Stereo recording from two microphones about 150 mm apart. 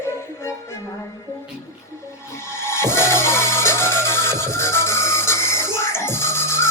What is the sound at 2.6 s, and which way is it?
Music, 15° left (ahead or behind).